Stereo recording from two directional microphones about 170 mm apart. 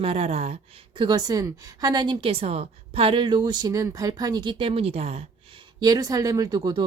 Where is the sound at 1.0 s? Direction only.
25° right (ahead or behind).